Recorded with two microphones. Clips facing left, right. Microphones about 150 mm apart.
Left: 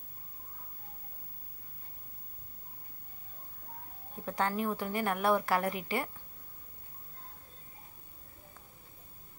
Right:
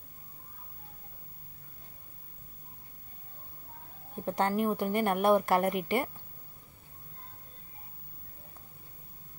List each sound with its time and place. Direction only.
4.2 s speech: 20° right (ahead or behind)
5.7 s a woman's voice: 60° right (ahead or behind)